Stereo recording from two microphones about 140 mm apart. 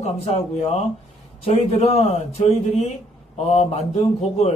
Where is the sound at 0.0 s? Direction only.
50° left (ahead or behind).